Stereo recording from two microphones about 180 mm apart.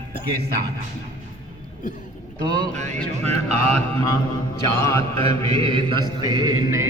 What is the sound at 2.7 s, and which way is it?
Music, 40° right (ahead or behind).